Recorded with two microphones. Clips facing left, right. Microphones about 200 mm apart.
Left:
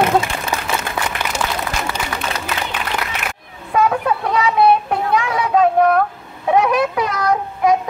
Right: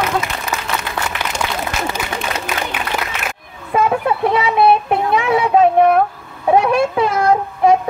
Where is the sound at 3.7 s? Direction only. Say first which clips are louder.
Right 1 dB; 25° right (ahead or behind).